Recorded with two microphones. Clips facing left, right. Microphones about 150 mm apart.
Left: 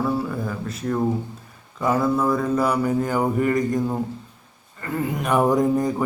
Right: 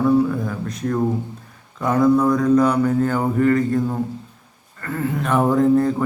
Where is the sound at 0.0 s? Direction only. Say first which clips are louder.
Right 7 dB; centre (ahead or behind).